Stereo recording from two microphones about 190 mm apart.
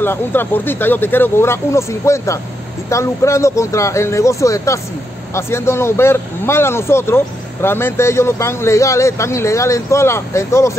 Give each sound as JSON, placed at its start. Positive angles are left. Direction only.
{"t": 0.0, "sound": "speech", "side_deg": 10}